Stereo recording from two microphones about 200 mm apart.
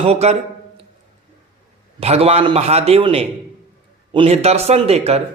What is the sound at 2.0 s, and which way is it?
A man's voice, 30° right (ahead or behind).